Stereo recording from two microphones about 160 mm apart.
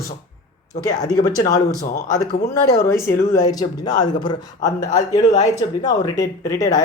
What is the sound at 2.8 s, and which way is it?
Speech, 20° left (ahead or behind).